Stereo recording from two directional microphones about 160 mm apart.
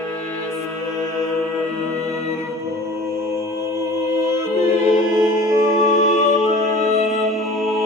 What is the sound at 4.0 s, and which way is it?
Music, 15° right (ahead or behind).